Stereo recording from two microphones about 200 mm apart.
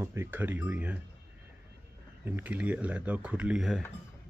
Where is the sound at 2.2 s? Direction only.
10° right (ahead or behind).